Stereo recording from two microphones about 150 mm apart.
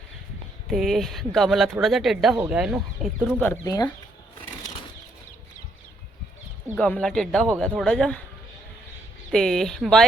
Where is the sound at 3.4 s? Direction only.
10° left (ahead or behind).